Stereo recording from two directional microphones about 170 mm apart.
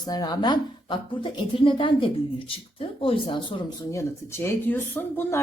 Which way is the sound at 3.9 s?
15° left (ahead or behind).